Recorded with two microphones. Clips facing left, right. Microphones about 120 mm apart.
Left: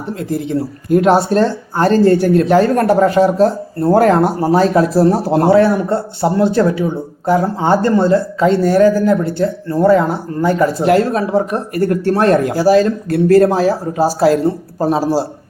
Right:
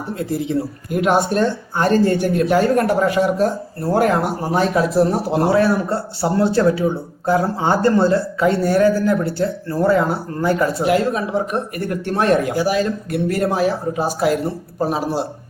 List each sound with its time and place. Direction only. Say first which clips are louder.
0.9 s speech: left 6 dB; 35° left (ahead or behind)
5.5 s speech: left 5 dB; 25° left (ahead or behind)
10.8 s speech: left 5 dB; 40° left (ahead or behind)
13.1 s speech: left 10 dB; 20° right (ahead or behind)
13.4 s speech: left 5 dB; 35° left (ahead or behind)